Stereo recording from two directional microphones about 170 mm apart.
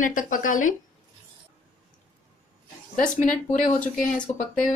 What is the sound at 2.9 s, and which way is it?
A woman's voice, 50° left (ahead or behind).